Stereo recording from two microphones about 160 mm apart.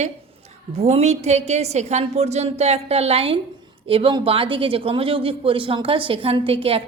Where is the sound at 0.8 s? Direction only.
40° right (ahead or behind).